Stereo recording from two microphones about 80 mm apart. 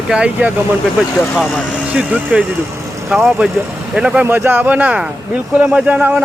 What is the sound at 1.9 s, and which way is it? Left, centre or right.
Speech, centre.